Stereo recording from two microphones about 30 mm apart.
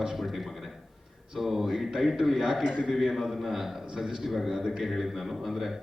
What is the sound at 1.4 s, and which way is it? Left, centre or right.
A man's voice, centre.